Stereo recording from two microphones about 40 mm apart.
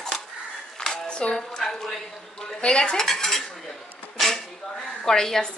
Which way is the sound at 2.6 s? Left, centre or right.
Left.